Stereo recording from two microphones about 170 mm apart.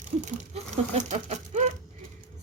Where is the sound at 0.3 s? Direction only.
45° right (ahead or behind).